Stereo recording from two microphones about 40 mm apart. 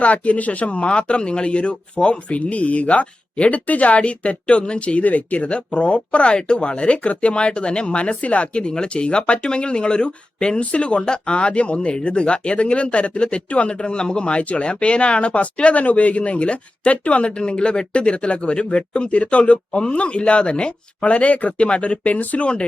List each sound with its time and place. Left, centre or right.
0.0 s speech: left
22.4 s speech: left